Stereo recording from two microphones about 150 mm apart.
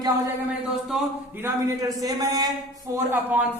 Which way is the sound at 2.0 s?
25° right (ahead or behind).